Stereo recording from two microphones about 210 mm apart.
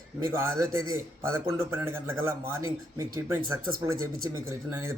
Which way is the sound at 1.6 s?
10° right (ahead or behind).